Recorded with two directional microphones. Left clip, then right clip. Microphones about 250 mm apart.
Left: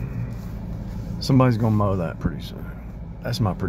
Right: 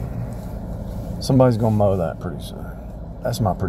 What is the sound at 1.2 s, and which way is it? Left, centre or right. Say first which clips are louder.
Speech: right 4 dB; centre.